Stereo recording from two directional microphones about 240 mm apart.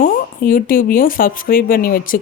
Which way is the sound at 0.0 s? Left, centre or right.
Left.